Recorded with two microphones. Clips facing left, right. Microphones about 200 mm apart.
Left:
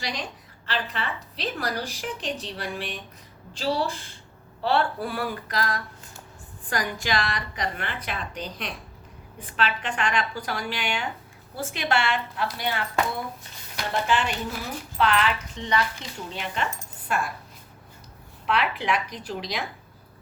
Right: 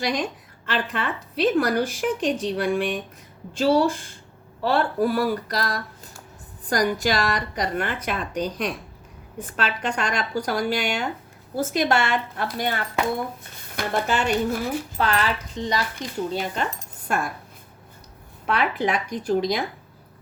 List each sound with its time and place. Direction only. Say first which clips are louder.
0.0 s a woman's voice: right 8 dB; 50° right (ahead or behind)
18.4 s a woman's voice: right 2 dB; 45° right (ahead or behind)